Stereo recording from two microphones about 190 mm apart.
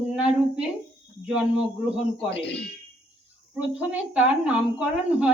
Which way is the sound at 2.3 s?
65° left (ahead or behind).